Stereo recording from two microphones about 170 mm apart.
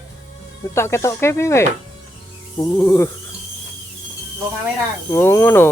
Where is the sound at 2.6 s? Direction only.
20° left (ahead or behind).